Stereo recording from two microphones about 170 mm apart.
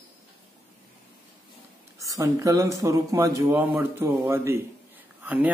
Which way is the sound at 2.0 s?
20° right (ahead or behind).